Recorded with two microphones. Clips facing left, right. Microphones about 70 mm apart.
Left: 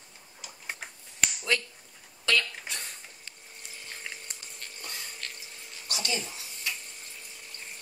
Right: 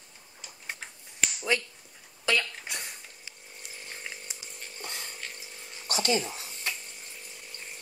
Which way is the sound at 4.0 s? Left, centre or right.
Centre.